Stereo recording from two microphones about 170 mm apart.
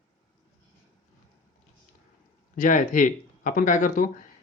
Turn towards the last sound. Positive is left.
turn(degrees=50)  # may be behind; listen again after turning